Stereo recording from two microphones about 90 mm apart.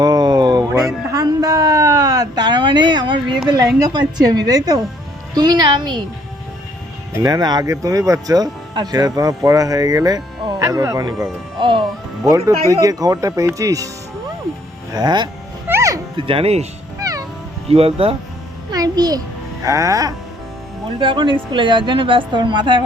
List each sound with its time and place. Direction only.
0.0 s a sound: 50° right (ahead or behind)
3.5 s speech: 50° right (ahead or behind)
7.2 s speech: 45° right (ahead or behind)
11.5 s speech: 65° right (ahead or behind)
12.3 s speech: 40° right (ahead or behind)
14.9 s speech: 55° right (ahead or behind)
15.6 s music: 25° right (ahead or behind)
16.1 s speech: 90° right
17.0 s music: 40° right (ahead or behind)
17.7 s speech: 90° right
18.7 s a child's voice: 45° right (ahead or behind)
21.0 s a woman's voice: 65° right (ahead or behind)